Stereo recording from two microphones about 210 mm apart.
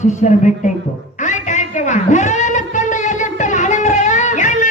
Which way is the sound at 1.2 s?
35° left (ahead or behind).